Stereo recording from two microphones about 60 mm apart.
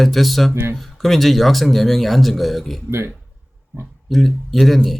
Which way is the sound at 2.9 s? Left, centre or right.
Right.